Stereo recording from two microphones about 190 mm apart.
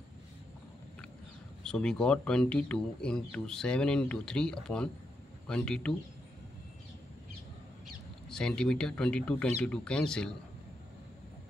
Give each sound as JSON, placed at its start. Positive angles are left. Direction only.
{"t": 1.6, "sound": "speech", "side_deg": 5}
{"t": 8.3, "sound": "speech", "side_deg": 5}